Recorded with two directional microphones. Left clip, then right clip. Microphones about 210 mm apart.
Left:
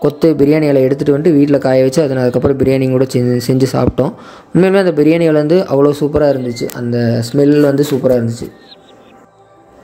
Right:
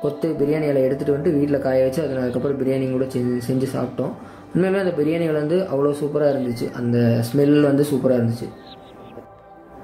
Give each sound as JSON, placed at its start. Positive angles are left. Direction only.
{"t": 0.2, "sound": "a man's voice", "side_deg": 45}